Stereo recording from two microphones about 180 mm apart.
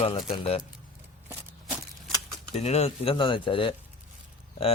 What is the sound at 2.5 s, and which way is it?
Speech, 35° left (ahead or behind).